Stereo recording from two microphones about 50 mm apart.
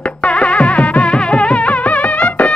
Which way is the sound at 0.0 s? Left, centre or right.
Left.